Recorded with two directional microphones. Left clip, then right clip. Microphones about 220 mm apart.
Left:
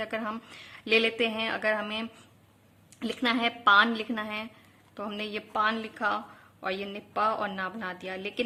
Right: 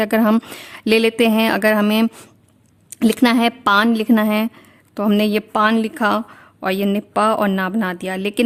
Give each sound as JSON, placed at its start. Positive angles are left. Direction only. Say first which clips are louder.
{"t": 0.0, "sound": "a woman's voice", "louder": "right 16 dB", "side_deg": -50}